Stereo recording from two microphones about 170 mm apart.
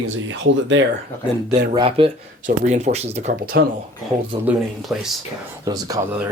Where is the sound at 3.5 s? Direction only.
90° right.